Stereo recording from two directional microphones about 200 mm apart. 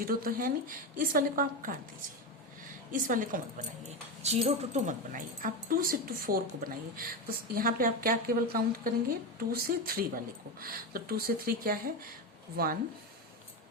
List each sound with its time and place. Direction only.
0.1 s speech: 45° right (ahead or behind)
2.9 s speech: 45° right (ahead or behind)